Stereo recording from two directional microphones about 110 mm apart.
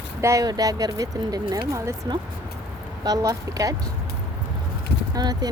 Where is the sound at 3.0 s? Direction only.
35° right (ahead or behind).